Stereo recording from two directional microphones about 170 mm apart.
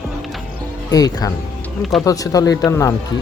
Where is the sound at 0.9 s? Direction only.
20° left (ahead or behind).